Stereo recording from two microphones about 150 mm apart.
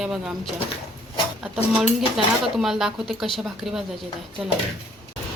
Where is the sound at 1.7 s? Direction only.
Centre (ahead or behind).